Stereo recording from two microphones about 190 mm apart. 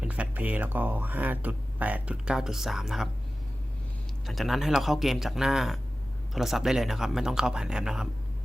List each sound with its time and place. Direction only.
0.0 s speech: 10° right (ahead or behind)
4.3 s speech: centre (ahead or behind)